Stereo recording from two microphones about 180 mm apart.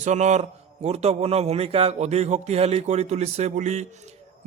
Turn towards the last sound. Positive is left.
turn(degrees=-40)  # may be behind; listen again after turning